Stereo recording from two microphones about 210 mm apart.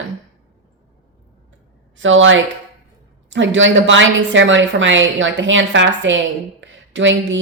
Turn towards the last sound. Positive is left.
turn(degrees=-60)  # may be behind; listen again after turning